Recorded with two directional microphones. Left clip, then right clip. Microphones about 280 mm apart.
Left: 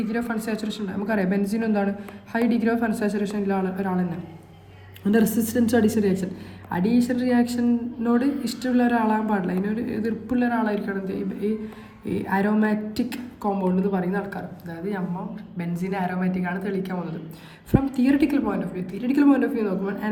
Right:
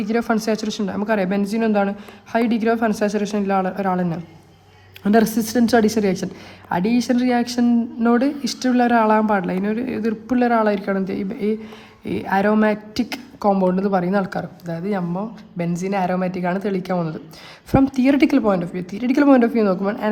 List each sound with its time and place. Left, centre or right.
0.1 s a woman's voice: centre